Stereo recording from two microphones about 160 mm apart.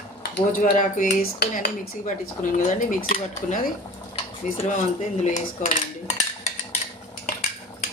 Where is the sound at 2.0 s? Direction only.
55° left (ahead or behind).